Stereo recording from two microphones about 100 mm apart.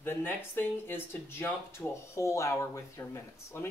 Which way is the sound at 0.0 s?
20° left (ahead or behind).